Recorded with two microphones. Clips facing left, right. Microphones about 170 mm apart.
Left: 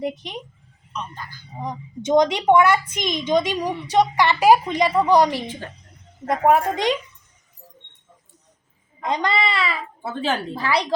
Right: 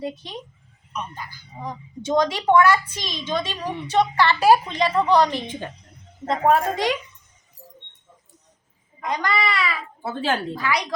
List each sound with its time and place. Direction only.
0.0 s a woman's voice: 20° left (ahead or behind)
0.9 s speech: 10° right (ahead or behind)
1.5 s a woman's voice: 20° left (ahead or behind)
9.0 s a woman's voice: 25° left (ahead or behind)
10.0 s a woman's voice: centre (ahead or behind)
10.5 s a woman's voice: 30° left (ahead or behind)